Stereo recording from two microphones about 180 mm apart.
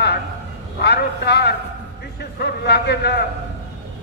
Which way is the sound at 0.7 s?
65° left (ahead or behind).